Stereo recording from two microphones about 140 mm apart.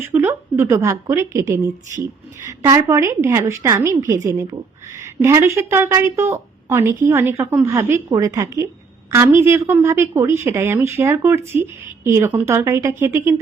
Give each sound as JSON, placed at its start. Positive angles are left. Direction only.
{"t": 0.0, "sound": "a woman's voice", "side_deg": -15}